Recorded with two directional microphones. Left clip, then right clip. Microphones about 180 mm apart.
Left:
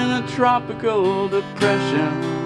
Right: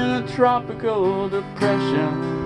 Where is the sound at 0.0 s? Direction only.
20° left (ahead or behind).